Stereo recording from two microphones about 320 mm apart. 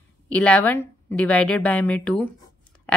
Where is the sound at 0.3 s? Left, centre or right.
Centre.